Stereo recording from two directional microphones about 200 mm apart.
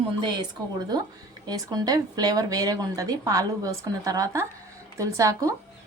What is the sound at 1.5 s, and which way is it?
Speech, 20° right (ahead or behind).